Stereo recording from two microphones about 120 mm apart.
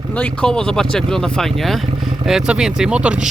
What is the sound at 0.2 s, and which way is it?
Speech, 5° left (ahead or behind).